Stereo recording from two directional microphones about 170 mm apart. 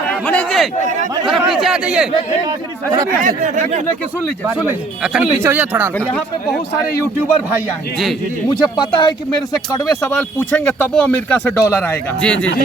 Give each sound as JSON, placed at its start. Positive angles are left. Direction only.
{"t": 0.1, "sound": "a sound", "side_deg": 10}
{"t": 1.2, "sound": "speech", "side_deg": 0}
{"t": 3.2, "sound": "speech", "side_deg": -50}
{"t": 4.4, "sound": "speech", "side_deg": -10}
{"t": 8.6, "sound": "speech", "side_deg": 25}